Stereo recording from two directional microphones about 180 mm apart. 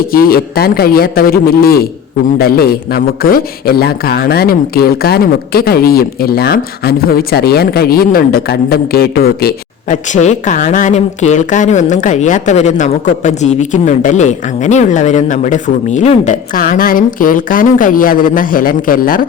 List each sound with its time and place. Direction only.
0.1 s a man's voice: 55° left (ahead or behind)
9.9 s speech: 40° left (ahead or behind)